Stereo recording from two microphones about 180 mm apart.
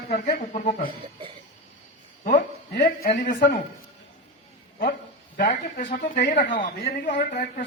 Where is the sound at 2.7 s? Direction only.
60° left (ahead or behind).